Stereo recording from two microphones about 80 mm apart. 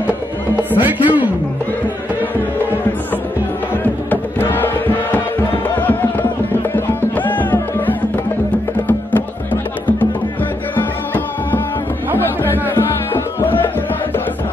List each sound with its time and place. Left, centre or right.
0.7 s music: right
3.7 s music: left